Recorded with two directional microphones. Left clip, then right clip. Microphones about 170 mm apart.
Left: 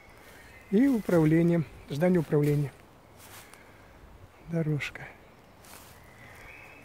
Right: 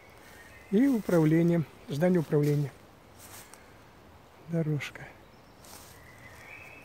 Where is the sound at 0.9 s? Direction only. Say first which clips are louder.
Left 1 dB; centre (ahead or behind).